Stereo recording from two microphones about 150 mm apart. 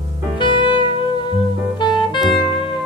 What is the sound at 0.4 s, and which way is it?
Music, 30° left (ahead or behind).